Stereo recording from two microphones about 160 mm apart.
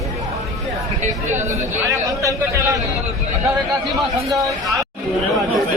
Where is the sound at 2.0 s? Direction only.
20° right (ahead or behind).